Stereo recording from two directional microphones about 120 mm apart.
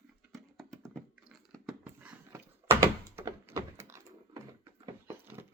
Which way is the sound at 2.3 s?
25° right (ahead or behind).